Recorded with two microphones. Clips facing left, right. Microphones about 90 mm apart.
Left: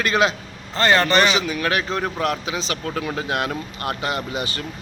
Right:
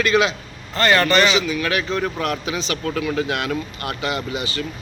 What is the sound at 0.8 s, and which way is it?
Speech, 25° left (ahead or behind).